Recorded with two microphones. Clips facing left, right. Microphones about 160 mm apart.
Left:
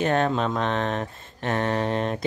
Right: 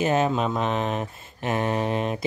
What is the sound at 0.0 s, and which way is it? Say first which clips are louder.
Speech: even; 5° right (ahead or behind).